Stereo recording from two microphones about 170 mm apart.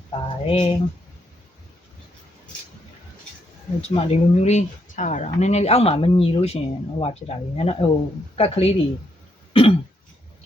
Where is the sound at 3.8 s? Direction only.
35° left (ahead or behind).